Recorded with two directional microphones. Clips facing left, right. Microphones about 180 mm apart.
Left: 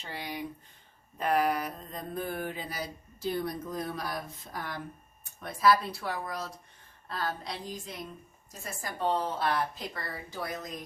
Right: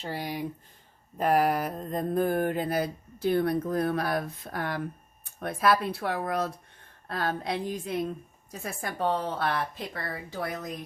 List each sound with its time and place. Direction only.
0.0 s speech: 40° right (ahead or behind)
1.2 s mantra: 45° right (ahead or behind); by 10.7 s 60° right (ahead or behind)